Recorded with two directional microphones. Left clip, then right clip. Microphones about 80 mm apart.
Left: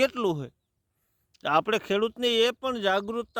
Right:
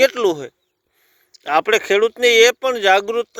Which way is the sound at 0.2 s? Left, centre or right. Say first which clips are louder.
Right 10 dB; left.